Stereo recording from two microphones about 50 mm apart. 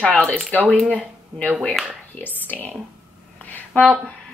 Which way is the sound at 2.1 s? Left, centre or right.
Left.